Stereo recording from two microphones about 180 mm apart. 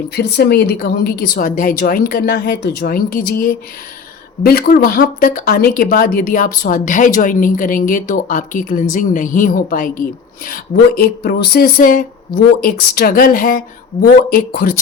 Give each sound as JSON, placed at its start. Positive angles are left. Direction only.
{"t": 0.1, "sound": "speech", "side_deg": 65}